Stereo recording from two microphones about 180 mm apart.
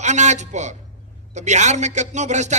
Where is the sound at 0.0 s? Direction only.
40° right (ahead or behind).